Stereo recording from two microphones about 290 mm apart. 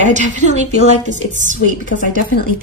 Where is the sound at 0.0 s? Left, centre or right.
Right.